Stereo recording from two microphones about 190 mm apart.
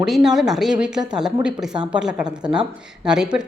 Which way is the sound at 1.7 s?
25° right (ahead or behind).